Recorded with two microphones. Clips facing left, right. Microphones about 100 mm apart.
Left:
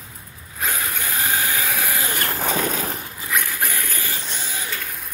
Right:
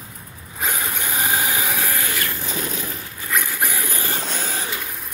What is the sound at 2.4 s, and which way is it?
Vehicle, 60° left (ahead or behind).